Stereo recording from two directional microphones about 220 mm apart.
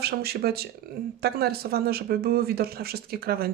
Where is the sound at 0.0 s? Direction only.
45° right (ahead or behind).